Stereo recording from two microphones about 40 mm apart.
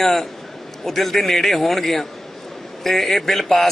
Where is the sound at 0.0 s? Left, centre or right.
Centre.